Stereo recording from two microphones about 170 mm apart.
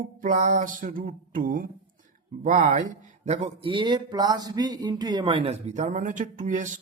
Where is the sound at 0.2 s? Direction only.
50° right (ahead or behind).